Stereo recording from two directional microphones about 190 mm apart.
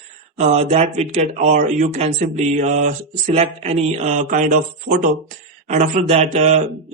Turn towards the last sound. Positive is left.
turn(degrees=-35)  # may be behind; listen again after turning